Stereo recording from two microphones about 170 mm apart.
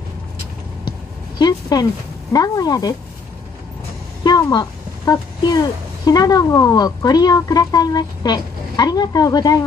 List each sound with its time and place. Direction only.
1.4 s a sound: 25° left (ahead or behind)
2.3 s a woman's voice: 20° left (ahead or behind)
4.2 s a woman's voice: 25° left (ahead or behind)